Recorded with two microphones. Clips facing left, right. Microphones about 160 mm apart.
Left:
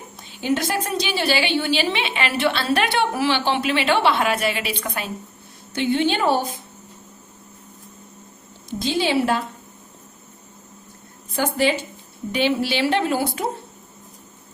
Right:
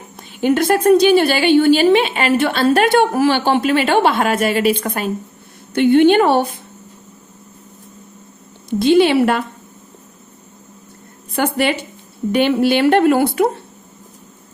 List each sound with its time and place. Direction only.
0.2 s a woman's voice: 55° right (ahead or behind)
8.8 s speech: 60° right (ahead or behind)
11.3 s speech: 65° right (ahead or behind)
12.3 s speech: 55° right (ahead or behind)